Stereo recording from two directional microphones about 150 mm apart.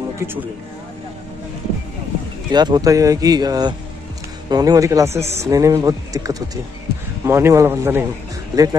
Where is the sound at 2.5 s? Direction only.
30° right (ahead or behind).